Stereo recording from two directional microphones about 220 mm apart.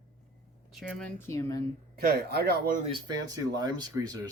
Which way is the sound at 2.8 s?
20° right (ahead or behind).